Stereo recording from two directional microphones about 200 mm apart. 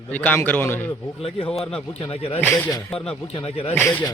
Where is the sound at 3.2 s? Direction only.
30° left (ahead or behind).